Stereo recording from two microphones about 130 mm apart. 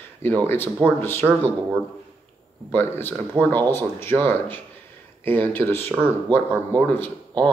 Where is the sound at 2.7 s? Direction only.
15° left (ahead or behind).